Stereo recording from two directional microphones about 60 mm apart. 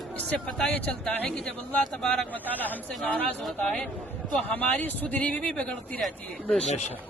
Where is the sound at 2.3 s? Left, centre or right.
Left.